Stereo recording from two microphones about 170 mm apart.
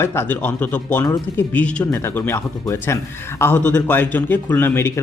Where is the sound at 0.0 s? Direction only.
15° left (ahead or behind).